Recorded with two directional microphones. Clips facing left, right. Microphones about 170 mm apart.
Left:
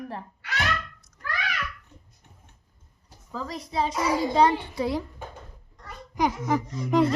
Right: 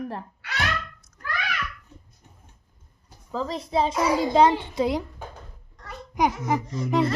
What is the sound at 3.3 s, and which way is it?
A woman's voice, 30° right (ahead or behind).